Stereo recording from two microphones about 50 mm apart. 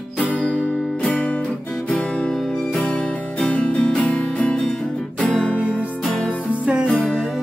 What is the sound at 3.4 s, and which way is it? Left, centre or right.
Music, left.